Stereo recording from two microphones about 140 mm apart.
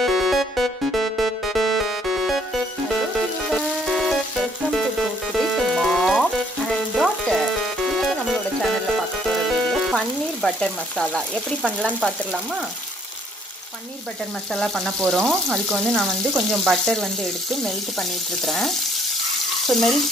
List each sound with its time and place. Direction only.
0.0 s music: centre (ahead or behind)
3.4 s music: centre (ahead or behind)
7.0 s frying: centre (ahead or behind)
9.3 s music: centre (ahead or behind)
11.8 s frying: 5° right (ahead or behind)
14.5 s frying: 5° left (ahead or behind)
19.6 s speech: centre (ahead or behind)